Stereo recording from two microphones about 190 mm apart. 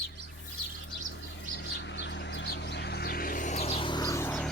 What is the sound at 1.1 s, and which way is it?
Bird, 70° left (ahead or behind).